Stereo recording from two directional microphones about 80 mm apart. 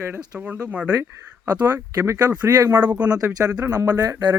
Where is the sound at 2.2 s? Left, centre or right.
Right.